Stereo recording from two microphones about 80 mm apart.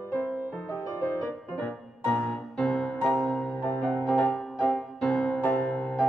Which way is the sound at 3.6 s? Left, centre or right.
Left.